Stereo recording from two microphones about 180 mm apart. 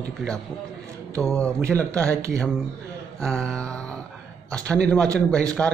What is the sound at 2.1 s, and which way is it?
Speech, 15° right (ahead or behind).